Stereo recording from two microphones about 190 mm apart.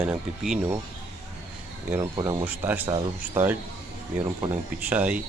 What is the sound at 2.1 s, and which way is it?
Speech, 25° right (ahead or behind).